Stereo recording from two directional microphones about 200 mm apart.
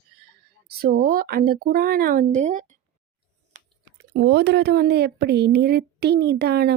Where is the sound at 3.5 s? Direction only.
40° right (ahead or behind).